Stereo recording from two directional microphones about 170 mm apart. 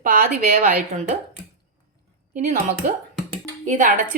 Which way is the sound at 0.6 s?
45° right (ahead or behind).